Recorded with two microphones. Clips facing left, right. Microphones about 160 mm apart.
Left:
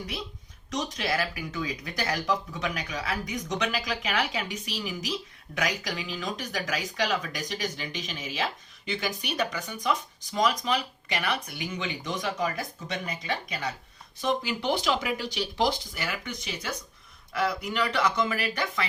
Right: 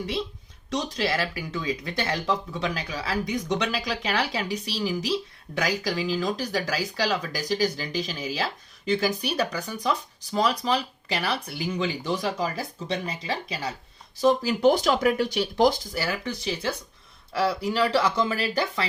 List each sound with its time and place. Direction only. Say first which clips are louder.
0.7 s speech: right 3 dB; 30° right (ahead or behind)